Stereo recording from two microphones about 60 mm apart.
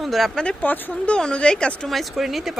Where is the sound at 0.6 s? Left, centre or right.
Left.